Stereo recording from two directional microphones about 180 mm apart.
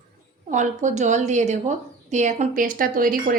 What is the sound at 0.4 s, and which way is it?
A woman's voice, 45° right (ahead or behind).